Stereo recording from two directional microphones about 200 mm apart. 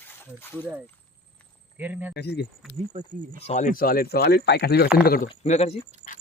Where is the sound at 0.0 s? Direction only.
10° left (ahead or behind).